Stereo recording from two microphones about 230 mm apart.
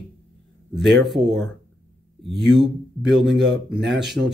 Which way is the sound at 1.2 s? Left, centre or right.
Right.